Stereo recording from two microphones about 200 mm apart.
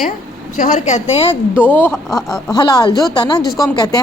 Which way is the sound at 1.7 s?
10° left (ahead or behind).